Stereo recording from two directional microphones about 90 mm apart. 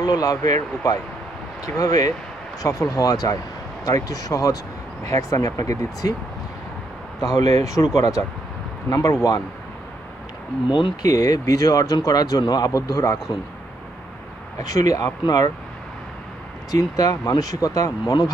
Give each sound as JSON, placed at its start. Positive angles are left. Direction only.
{"t": 0.0, "sound": "speech", "side_deg": 45}
{"t": 7.2, "sound": "speech", "side_deg": 40}
{"t": 11.0, "sound": "speech", "side_deg": 45}
{"t": 14.6, "sound": "speech", "side_deg": 40}
{"t": 16.7, "sound": "speech", "side_deg": 40}